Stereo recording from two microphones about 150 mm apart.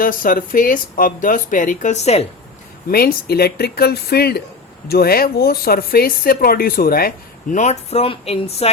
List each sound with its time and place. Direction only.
0.0 s speech: 65° left (ahead or behind); by 2.2 s 45° left (ahead or behind)
2.9 s speech: 85° left
7.5 s speech: 50° left (ahead or behind)